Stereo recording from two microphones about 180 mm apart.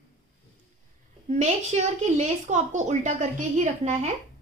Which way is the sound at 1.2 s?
40° right (ahead or behind).